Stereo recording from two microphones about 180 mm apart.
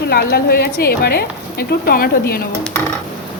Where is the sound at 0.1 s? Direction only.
60° left (ahead or behind).